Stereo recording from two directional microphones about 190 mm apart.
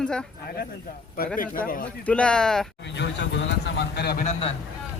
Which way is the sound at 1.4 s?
50° left (ahead or behind).